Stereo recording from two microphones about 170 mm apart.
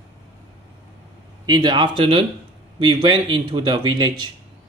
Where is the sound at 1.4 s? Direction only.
25° right (ahead or behind).